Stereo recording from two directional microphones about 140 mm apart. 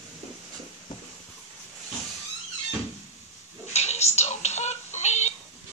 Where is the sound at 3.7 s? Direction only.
50° left (ahead or behind).